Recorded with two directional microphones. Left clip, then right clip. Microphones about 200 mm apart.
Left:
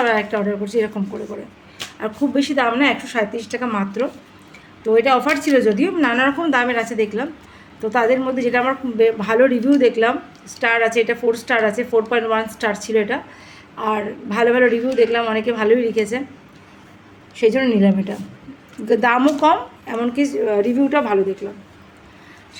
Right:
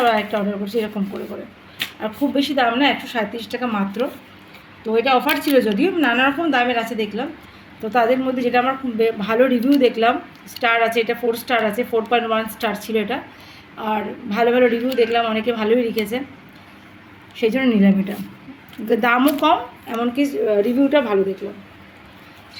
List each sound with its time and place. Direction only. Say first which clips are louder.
0.0 s a man's voice: even; 5° left (ahead or behind)
2.0 s a man's voice: left 2 dB; centre (ahead or behind)
17.3 s a man's voice: left 3 dB; centre (ahead or behind)